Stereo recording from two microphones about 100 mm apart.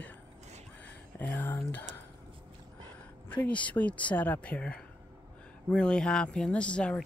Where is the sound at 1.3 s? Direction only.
20° left (ahead or behind).